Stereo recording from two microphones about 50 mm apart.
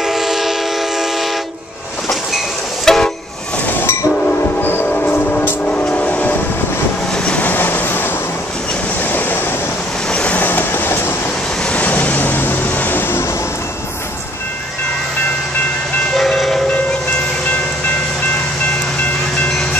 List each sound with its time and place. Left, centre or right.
0.0 s train: centre
2.0 s train: centre
4.6 s train: left
5.7 s vehicle: left
7.4 s vehicle: left
10.0 s vehicle: left
10.4 s train: left
11.6 s vehicle: left
16.2 s train: centre